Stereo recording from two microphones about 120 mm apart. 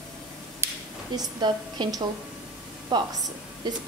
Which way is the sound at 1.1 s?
35° right (ahead or behind).